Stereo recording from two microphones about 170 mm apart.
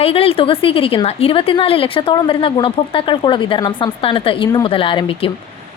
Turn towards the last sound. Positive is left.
turn(degrees=30)  # may be behind; listen again after turning